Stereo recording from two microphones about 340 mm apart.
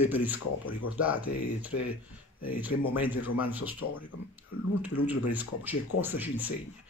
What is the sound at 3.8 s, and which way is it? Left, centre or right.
Speech, left.